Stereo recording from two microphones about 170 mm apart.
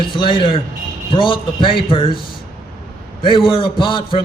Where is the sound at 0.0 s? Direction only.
30° left (ahead or behind).